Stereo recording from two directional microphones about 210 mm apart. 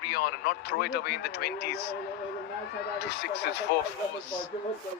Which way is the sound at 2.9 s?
50° left (ahead or behind).